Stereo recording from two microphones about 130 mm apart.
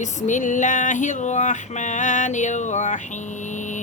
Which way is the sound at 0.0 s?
70° left (ahead or behind).